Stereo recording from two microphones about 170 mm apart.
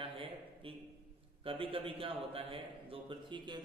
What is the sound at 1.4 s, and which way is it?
A man's voice, 30° right (ahead or behind).